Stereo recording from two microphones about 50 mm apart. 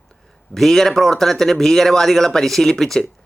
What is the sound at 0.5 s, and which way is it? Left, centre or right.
Speech, centre.